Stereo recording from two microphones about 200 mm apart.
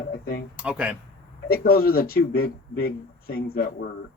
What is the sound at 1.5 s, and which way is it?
Speech, 50° left (ahead or behind).